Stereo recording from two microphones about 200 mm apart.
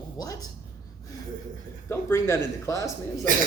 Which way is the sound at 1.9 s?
10° left (ahead or behind).